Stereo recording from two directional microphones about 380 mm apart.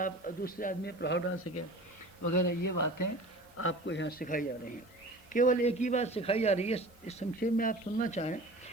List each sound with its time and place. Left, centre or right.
0.0 s a man's voice: left
2.2 s speech: left
3.6 s a man's voice: left